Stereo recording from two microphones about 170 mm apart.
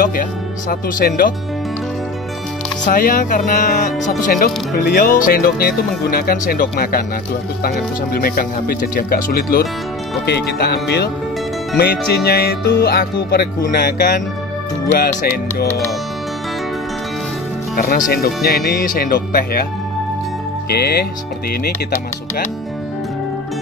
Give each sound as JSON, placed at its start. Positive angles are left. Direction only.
{"t": 0.0, "sound": "speech", "side_deg": 55}
{"t": 2.8, "sound": "speech", "side_deg": 55}
{"t": 10.2, "sound": "speech", "side_deg": 70}
{"t": 13.7, "sound": "speech", "side_deg": 55}
{"t": 17.7, "sound": "speech", "side_deg": 55}
{"t": 20.7, "sound": "speech", "side_deg": 65}